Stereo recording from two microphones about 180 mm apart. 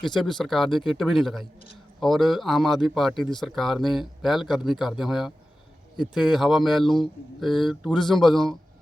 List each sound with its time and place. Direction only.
0.0 s speech: centre (ahead or behind)